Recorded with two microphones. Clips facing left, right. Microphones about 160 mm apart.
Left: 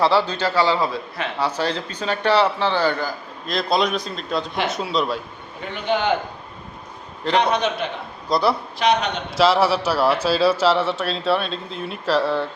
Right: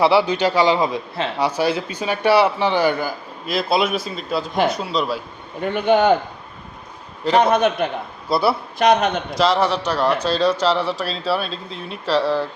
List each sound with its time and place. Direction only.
0.0 s speech: 15° right (ahead or behind)
5.7 s a man's voice: 50° right (ahead or behind)
7.3 s a man's voice: 45° right (ahead or behind)
8.3 s speech: 5° right (ahead or behind)
8.8 s a man's voice: 50° right (ahead or behind)
9.4 s speech: 5° left (ahead or behind)